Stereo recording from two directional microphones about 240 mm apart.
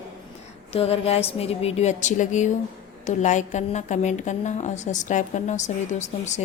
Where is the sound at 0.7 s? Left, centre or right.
Left.